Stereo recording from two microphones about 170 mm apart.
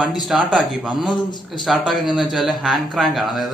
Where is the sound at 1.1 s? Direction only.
25° left (ahead or behind).